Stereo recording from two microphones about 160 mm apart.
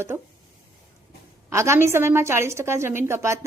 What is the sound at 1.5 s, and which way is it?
A woman's voice, 15° right (ahead or behind).